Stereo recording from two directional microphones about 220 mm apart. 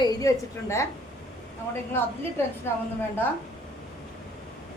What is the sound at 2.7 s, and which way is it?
Speech, 10° left (ahead or behind).